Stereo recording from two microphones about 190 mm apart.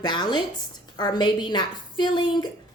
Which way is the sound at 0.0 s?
20° left (ahead or behind).